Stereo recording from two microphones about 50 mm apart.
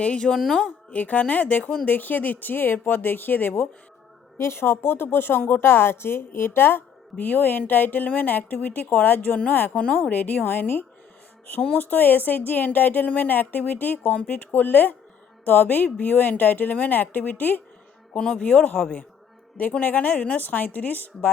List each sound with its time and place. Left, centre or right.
0.0 s a woman's voice: left
4.4 s a woman's voice: left
18.2 s speech: centre
19.8 s a woman's voice: left